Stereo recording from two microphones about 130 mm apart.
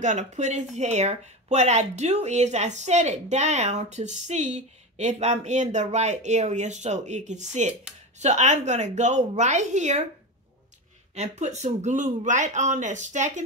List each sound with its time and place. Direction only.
0.0 s speech: 70° right (ahead or behind)
11.1 s speech: 60° right (ahead or behind)